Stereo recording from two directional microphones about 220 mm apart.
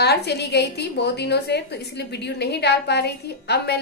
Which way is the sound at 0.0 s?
50° left (ahead or behind).